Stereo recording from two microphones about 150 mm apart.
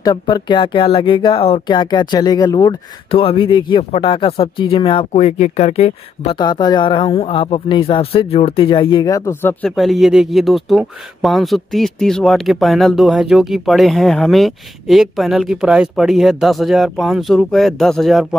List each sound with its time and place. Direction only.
0.0 s speech: 30° left (ahead or behind)
3.1 s speech: 35° left (ahead or behind)
5.1 s speech: 50° left (ahead or behind)
6.4 s speech: 30° left (ahead or behind)
9.7 s speech: centre (ahead or behind)